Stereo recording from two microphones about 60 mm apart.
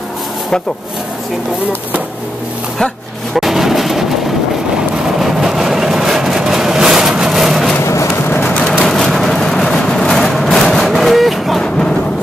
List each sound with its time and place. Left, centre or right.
3.3 s vehicle: centre
5.0 s vehicle: centre
7.8 s vehicle: left
8.5 s a sound: centre
8.8 s vehicle: centre